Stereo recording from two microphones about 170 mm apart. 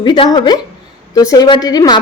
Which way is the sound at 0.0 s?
25° left (ahead or behind).